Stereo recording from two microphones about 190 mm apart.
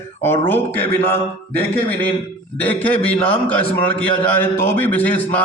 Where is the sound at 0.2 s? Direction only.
10° left (ahead or behind).